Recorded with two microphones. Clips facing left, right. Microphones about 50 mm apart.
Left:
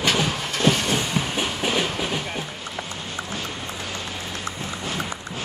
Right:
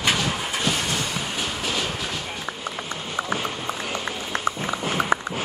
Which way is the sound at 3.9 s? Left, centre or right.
Right.